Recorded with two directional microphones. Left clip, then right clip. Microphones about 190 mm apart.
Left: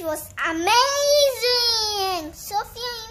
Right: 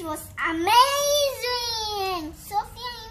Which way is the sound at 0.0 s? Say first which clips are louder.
Left 3 dB; 35° left (ahead or behind).